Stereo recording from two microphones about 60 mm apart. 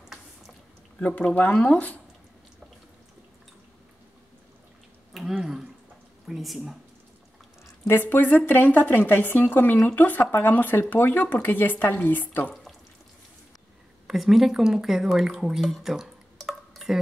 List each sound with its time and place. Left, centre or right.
0.9 s speech: left
5.4 s a sound: centre
6.2 s speech: centre
7.8 s a woman's voice: left
14.0 s speech: centre
15.8 s drip: centre